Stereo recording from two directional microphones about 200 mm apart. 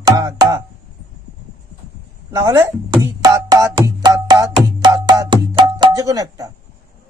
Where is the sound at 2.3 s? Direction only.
15° right (ahead or behind).